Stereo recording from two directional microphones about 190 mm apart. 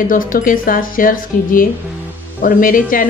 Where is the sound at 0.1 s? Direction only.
45° left (ahead or behind).